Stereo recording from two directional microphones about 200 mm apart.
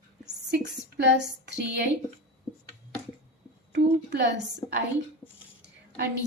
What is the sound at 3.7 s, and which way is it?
Speech, 60° right (ahead or behind).